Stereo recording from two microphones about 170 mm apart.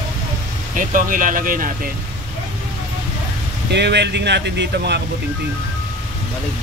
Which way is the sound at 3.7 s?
85° right.